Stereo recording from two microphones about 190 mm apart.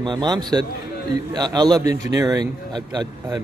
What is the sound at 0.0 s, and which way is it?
A man's voice, 25° right (ahead or behind).